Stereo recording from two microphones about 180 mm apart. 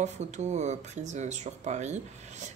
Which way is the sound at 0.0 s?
40° right (ahead or behind).